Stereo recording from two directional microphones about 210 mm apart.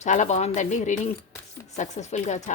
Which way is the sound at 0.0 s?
35° left (ahead or behind).